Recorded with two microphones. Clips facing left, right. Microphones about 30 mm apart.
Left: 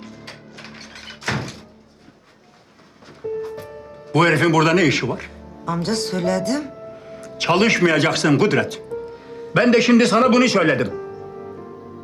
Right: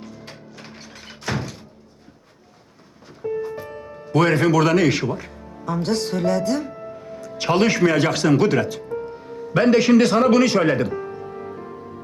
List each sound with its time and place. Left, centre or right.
0.0 s music: centre
3.4 s music: centre
3.7 s music: right
3.9 s speech: centre
6.9 s music: centre
7.3 s a man's voice: centre
10.9 s music: right